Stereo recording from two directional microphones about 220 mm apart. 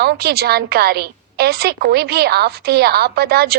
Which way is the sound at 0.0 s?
45° right (ahead or behind).